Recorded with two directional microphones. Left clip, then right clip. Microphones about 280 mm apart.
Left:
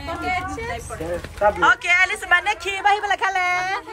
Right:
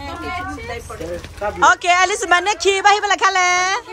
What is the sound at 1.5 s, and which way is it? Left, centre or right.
A woman's voice, centre.